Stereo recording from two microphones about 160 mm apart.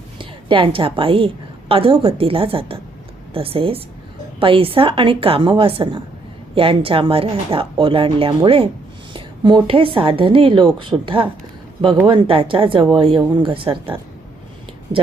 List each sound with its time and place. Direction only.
0.2 s a woman's voice: 30° right (ahead or behind)